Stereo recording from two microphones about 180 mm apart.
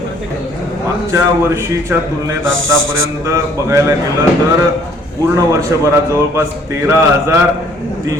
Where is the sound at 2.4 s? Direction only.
90° right.